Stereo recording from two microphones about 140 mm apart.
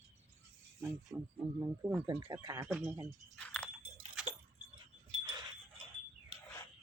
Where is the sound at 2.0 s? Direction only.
30° right (ahead or behind).